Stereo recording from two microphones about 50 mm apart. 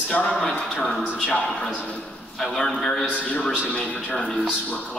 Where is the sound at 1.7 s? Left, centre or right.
Left.